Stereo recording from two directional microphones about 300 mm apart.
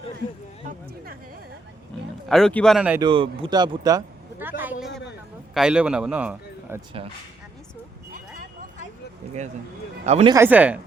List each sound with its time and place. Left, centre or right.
2.3 s speech: centre
3.1 s a sound: centre
5.5 s speech: centre
10.1 s speech: right
10.3 s speech: centre